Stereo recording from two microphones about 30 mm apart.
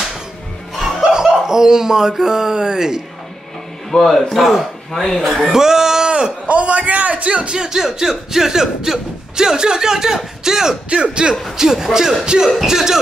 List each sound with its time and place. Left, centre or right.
1.1 s speech: right
3.9 s a man's voice: centre
4.4 s speech: centre
5.0 s speech: centre
5.5 s speech: centre
6.0 s a sound: right
6.4 s a man's voice: right
7.5 s speech: centre
10.9 s speech: right
11.5 s speech: centre